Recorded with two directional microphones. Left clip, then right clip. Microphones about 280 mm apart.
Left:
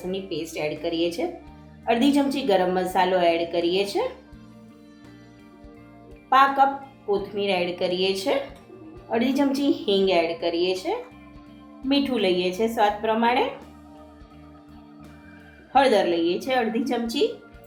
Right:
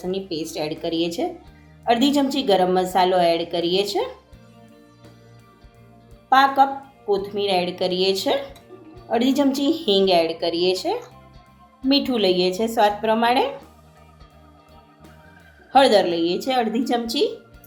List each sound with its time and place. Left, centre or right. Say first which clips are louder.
0.0 s a woman's voice: right 3 dB; right
6.3 s a woman's voice: right 2 dB; right
15.7 s a woman's voice: right 3 dB; right